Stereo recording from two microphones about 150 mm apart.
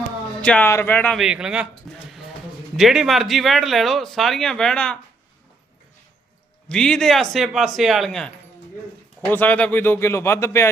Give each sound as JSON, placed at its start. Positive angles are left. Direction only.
{"t": 0.4, "sound": "speech", "side_deg": 10}
{"t": 1.1, "sound": "speech", "side_deg": -5}
{"t": 1.9, "sound": "a sound", "side_deg": 0}
{"t": 2.7, "sound": "speech", "side_deg": 0}
{"t": 6.7, "sound": "speech", "side_deg": 5}
{"t": 9.3, "sound": "speech", "side_deg": 10}